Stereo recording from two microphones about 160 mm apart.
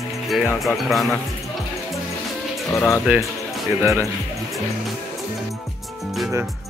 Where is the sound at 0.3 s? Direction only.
5° right (ahead or behind).